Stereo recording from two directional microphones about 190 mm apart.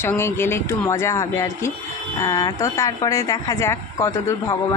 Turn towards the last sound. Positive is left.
turn(degrees=15)  # may be behind; listen again after turning